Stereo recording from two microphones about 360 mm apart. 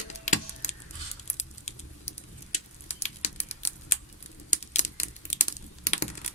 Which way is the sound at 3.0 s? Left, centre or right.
Centre.